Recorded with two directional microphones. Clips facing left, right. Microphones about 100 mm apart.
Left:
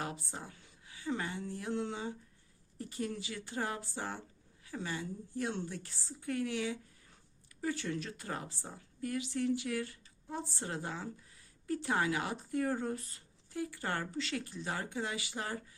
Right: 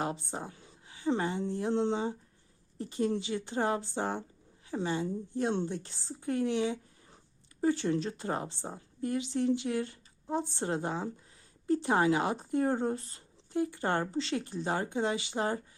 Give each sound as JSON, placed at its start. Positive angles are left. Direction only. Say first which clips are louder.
{"t": 0.0, "sound": "speech", "louder": "right 6 dB", "side_deg": -25}